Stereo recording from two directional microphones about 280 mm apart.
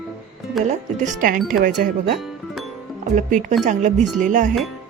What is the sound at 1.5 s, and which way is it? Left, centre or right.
Speech, right.